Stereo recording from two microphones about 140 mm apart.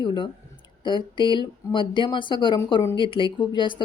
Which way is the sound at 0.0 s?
35° left (ahead or behind).